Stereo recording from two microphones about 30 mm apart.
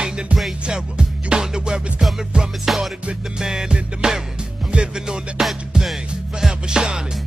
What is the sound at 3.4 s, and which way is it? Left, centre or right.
Music, centre.